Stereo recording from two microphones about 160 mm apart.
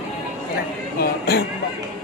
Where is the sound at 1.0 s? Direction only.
90° left.